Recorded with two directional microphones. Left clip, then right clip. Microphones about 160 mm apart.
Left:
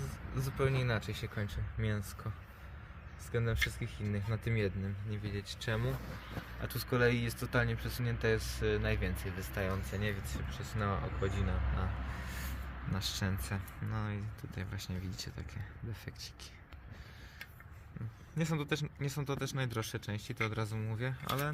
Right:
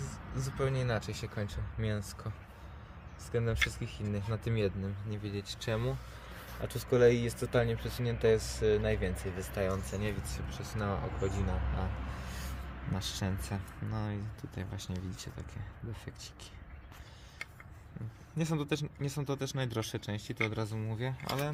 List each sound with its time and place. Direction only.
0.3 s speech: 10° left (ahead or behind)
3.3 s speech: centre (ahead or behind); by 14.9 s 20° right (ahead or behind)
15.1 s speech: 10° right (ahead or behind)
18.3 s speech: 10° right (ahead or behind)